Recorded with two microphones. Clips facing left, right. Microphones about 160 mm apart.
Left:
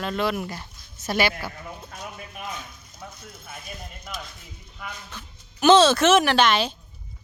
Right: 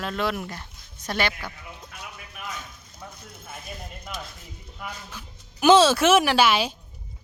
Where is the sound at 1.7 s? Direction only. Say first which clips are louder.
Left 4 dB; 40° left (ahead or behind).